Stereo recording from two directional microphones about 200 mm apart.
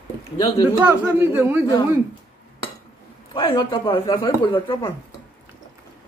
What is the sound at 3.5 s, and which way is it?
Speech, 25° left (ahead or behind).